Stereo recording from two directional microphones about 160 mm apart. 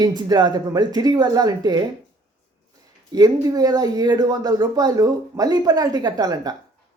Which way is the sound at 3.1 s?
25° right (ahead or behind).